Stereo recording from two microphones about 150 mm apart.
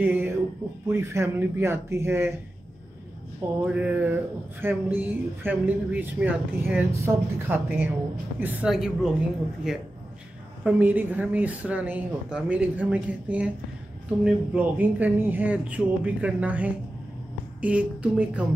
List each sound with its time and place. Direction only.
0.0 s speech: 15° right (ahead or behind)
3.6 s speech: 10° right (ahead or behind)